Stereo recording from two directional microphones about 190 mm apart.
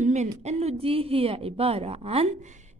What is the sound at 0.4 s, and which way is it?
A woman's voice, 35° right (ahead or behind).